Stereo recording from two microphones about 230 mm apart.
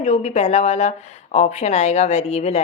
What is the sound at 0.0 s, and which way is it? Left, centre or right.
A woman's voice, left.